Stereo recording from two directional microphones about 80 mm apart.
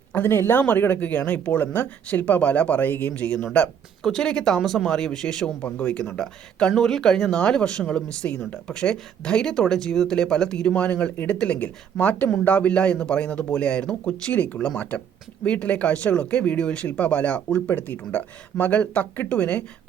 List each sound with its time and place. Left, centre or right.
0.1 s speech: left; by 5.5 s centre
5.6 s speech: centre